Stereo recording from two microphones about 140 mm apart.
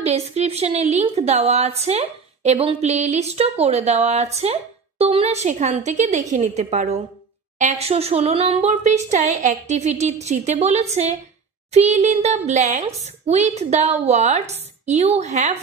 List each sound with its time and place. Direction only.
0.0 s a woman's voice: 50° right (ahead or behind)